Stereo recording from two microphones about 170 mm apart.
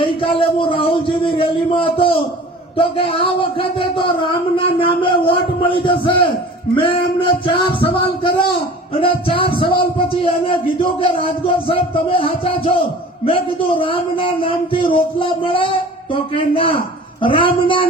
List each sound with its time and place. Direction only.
0.0 s speech: 30° left (ahead or behind)